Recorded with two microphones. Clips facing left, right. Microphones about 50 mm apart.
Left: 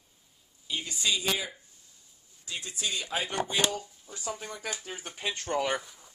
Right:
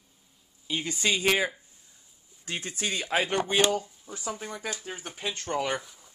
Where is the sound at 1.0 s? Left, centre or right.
Right.